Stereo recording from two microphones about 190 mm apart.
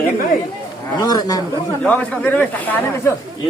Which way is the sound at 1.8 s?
10° left (ahead or behind).